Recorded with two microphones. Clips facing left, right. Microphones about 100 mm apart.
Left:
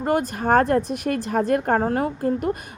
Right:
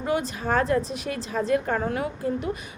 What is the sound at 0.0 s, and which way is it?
A woman's voice, 50° left (ahead or behind).